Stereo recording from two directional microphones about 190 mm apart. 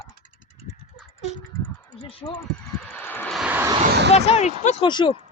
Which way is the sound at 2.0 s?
30° left (ahead or behind).